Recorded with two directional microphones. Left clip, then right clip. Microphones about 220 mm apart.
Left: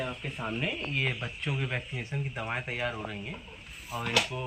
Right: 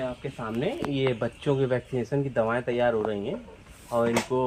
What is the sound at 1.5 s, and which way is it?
Speech, 40° right (ahead or behind).